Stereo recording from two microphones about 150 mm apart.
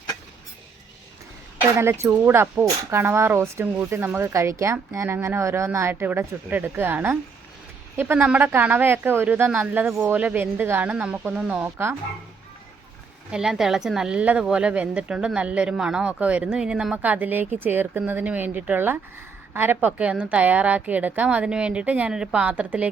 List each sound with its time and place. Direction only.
1.7 s speech: 15° right (ahead or behind)
13.3 s speech: 5° right (ahead or behind)